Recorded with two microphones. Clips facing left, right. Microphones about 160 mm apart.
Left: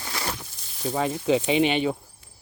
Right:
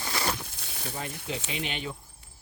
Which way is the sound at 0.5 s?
70° right (ahead or behind).